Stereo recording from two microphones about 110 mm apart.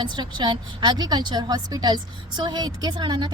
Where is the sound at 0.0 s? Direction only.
45° right (ahead or behind).